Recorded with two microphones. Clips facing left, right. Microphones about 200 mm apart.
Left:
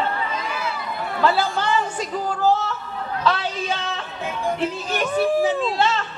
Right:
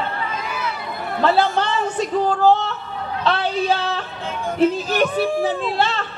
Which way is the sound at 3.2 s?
35° right (ahead or behind).